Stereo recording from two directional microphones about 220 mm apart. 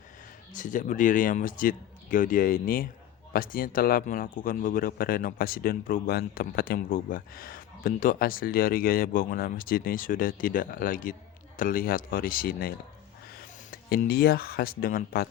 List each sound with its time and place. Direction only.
0.5 s a man's voice: 35° left (ahead or behind)
13.9 s speech: 45° left (ahead or behind)